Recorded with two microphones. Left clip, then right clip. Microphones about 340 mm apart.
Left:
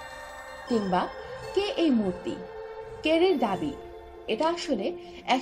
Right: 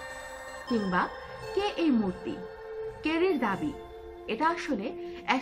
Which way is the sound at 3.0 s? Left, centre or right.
Centre.